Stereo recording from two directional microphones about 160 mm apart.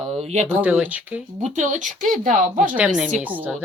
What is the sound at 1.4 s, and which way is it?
Speech, 45° right (ahead or behind).